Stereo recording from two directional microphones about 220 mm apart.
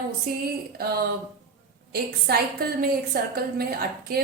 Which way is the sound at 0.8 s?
45° right (ahead or behind).